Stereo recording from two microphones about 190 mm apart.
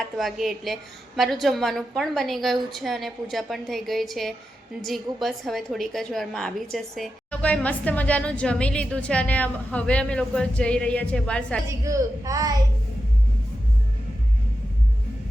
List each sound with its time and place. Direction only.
0.2 s a woman's voice: centre (ahead or behind)
11.7 s a child's voice: 15° right (ahead or behind)